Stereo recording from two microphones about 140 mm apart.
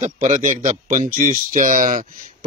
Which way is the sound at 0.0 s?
60° right (ahead or behind).